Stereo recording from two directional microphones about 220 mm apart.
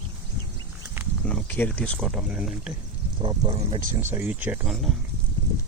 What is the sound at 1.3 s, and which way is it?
Speech, 5° left (ahead or behind).